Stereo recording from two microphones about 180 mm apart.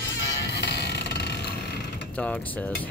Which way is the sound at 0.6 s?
70° left (ahead or behind).